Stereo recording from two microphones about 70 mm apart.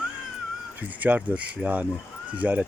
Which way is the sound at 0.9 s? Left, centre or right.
Right.